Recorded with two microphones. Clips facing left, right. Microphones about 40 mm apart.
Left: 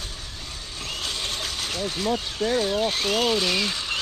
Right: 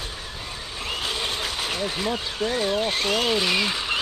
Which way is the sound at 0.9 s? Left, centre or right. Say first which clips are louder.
Right 3 dB; centre.